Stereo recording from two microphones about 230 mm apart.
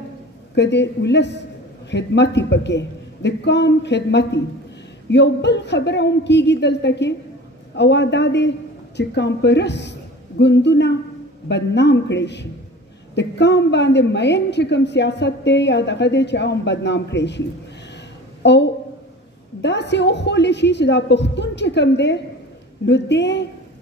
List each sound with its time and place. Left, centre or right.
0.6 s a woman's voice: left
18.4 s a woman's voice: left